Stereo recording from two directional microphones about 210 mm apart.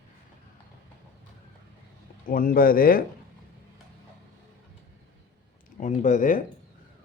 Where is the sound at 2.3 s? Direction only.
40° left (ahead or behind).